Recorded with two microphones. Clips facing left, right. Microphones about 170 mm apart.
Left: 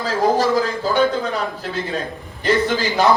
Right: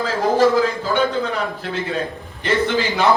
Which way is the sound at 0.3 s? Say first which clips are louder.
Right 3 dB; 40° left (ahead or behind).